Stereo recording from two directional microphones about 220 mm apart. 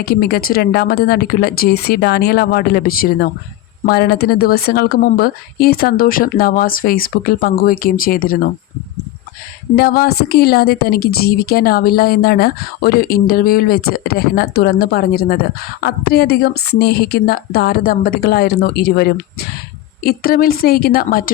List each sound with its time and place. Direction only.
0.0 s a woman's voice: 45° left (ahead or behind)
9.7 s a woman's voice: 45° left (ahead or behind)